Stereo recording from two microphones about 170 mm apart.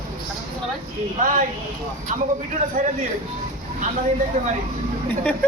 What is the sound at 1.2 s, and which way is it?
Speech, 50° right (ahead or behind).